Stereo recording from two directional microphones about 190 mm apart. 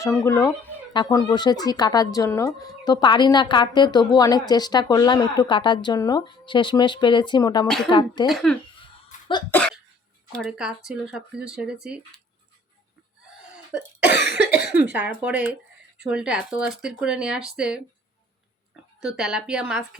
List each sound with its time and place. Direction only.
0.0 s speech: 15° left (ahead or behind)
8.3 s speech: centre (ahead or behind)
9.1 s cough: 40° left (ahead or behind)
9.5 s cough: 5° left (ahead or behind)
10.3 s speech: centre (ahead or behind)
13.4 s cough: 5° right (ahead or behind)
14.7 s speech: 10° right (ahead or behind)
18.9 s speech: 5° right (ahead or behind)